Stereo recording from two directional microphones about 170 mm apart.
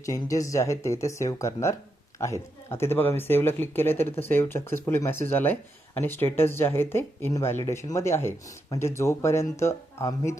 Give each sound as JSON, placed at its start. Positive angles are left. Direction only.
{"t": 0.0, "sound": "speech", "side_deg": 20}